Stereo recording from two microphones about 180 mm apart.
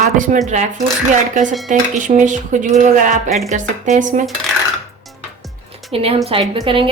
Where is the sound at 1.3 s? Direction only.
45° right (ahead or behind).